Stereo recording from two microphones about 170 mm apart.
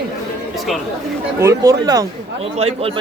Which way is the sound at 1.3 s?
20° right (ahead or behind).